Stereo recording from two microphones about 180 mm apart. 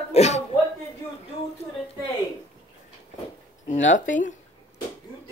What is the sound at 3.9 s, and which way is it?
Speech, 45° left (ahead or behind).